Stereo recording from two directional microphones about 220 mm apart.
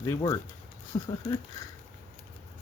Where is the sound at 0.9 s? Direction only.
20° left (ahead or behind).